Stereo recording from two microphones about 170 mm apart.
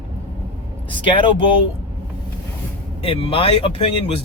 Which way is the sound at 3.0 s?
35° left (ahead or behind).